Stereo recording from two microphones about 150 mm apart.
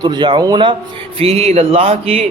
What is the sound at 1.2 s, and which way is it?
A man's voice, 40° right (ahead or behind).